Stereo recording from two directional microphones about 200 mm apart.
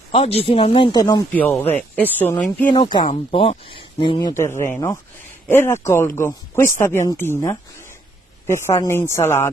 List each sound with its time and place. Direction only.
0.1 s speech: 30° left (ahead or behind)
1.3 s speech: 10° left (ahead or behind)
2.7 s speech: 20° left (ahead or behind)
4.3 s speech: 15° left (ahead or behind)